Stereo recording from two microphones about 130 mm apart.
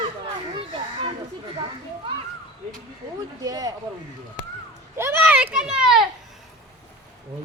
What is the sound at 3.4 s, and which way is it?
Speech, 30° right (ahead or behind).